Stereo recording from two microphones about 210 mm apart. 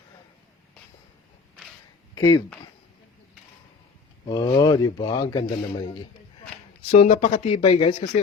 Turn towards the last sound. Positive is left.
turn(degrees=25)  # may be behind; listen again after turning